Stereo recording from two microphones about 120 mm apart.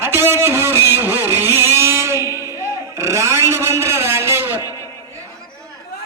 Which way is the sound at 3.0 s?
25° right (ahead or behind).